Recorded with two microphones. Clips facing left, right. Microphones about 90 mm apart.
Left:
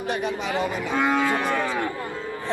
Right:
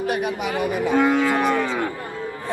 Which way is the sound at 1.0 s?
20° left (ahead or behind).